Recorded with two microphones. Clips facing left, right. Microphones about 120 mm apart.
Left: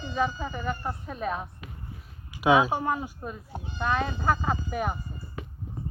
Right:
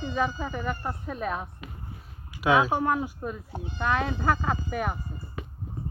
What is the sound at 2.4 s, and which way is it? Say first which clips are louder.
Speech: left 1 dB; 15° left (ahead or behind).